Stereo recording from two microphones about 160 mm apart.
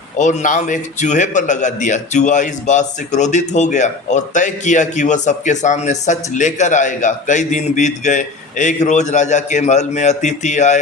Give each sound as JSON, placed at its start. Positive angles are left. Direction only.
{"t": 0.2, "sound": "a man's voice", "side_deg": 50}